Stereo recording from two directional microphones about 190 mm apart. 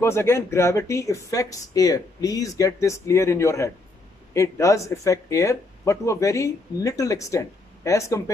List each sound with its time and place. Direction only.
0.0 s speech: 15° left (ahead or behind)